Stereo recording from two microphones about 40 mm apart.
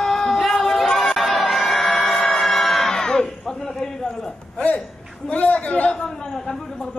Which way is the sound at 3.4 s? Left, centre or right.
Centre.